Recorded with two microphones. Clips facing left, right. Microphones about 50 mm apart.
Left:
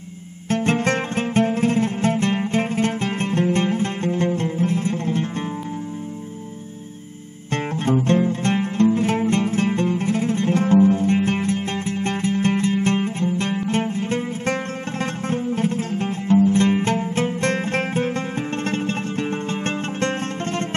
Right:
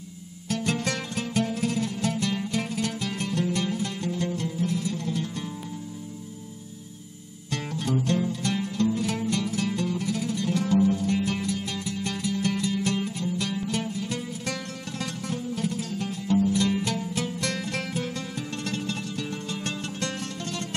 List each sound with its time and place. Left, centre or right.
0.5 s music: left
7.5 s music: left